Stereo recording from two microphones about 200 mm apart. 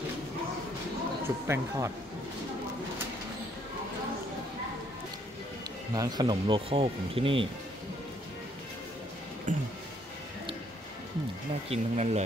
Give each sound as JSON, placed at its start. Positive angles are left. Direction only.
{"t": 1.2, "sound": "speech", "side_deg": -15}
{"t": 5.9, "sound": "speech", "side_deg": -20}
{"t": 9.5, "sound": "speech", "side_deg": -40}
{"t": 11.7, "sound": "speech", "side_deg": -35}